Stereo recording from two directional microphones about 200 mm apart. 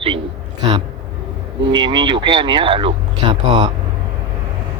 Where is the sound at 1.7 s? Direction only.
20° right (ahead or behind).